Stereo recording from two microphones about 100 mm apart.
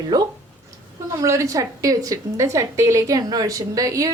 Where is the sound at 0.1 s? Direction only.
40° right (ahead or behind).